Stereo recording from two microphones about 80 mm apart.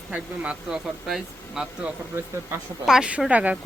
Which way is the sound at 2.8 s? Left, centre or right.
Centre.